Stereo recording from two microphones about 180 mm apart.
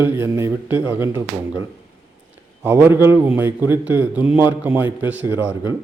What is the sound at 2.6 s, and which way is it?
A man's voice, 10° right (ahead or behind).